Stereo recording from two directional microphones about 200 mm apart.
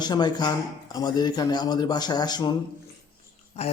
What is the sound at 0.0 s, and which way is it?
Speech, 20° left (ahead or behind).